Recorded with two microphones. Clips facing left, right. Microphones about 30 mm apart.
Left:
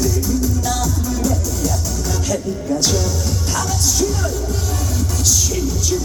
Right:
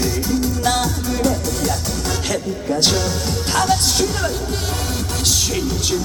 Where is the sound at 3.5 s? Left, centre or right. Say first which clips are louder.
Right 5 dB; right.